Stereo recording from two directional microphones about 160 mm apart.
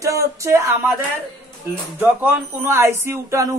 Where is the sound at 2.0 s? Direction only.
15° right (ahead or behind).